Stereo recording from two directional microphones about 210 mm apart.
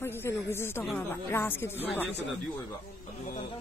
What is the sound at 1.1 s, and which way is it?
Speech, 10° left (ahead or behind).